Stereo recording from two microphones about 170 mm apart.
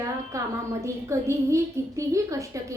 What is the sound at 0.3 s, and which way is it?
A woman's voice, 20° right (ahead or behind).